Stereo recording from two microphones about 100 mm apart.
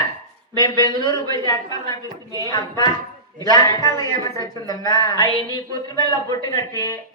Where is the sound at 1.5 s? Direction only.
40° left (ahead or behind).